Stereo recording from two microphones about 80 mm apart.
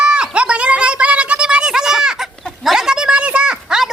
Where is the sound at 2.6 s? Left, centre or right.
Centre.